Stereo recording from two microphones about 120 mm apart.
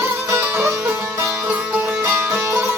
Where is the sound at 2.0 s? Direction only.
20° right (ahead or behind).